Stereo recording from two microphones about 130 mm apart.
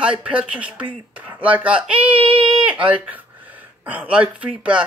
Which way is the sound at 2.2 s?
45° right (ahead or behind).